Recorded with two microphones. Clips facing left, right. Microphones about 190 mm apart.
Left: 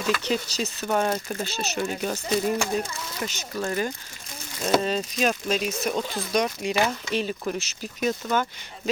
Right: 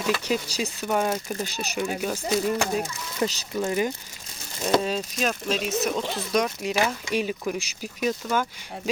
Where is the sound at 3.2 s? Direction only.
25° right (ahead or behind).